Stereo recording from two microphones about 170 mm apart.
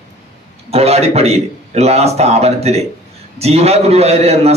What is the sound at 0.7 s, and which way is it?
A man's voice, 35° right (ahead or behind).